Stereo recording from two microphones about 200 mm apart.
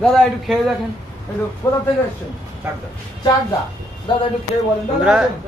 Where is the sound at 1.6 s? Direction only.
10° left (ahead or behind).